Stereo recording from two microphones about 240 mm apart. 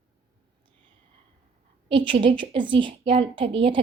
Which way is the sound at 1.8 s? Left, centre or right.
Right.